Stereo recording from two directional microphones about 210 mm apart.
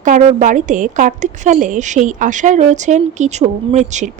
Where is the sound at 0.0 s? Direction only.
35° right (ahead or behind).